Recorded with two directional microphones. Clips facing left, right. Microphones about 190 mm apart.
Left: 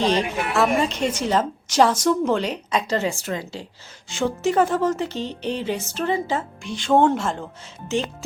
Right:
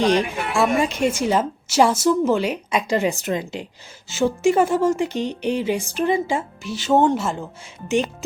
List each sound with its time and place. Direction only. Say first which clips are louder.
0.0 s a woman's voice: right 2 dB; 10° right (ahead or behind)